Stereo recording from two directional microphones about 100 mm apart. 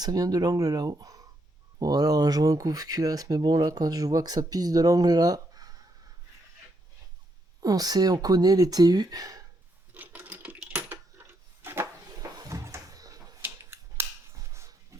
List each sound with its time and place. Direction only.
0.0 s speech: 40° right (ahead or behind)
7.6 s speech: 40° right (ahead or behind)
9.9 s typing: 15° right (ahead or behind)
11.2 s a sound: 25° right (ahead or behind)
12.2 s a sound: 35° right (ahead or behind)
13.4 s scissors: 25° right (ahead or behind)
14.5 s dog: 30° right (ahead or behind)